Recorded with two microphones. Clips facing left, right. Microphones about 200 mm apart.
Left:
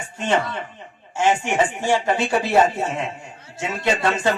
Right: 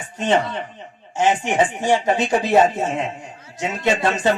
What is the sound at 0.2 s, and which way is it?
A man's voice, 20° right (ahead or behind).